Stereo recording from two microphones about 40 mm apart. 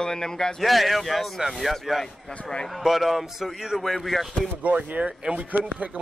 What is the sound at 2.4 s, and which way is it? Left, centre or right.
Speech, centre.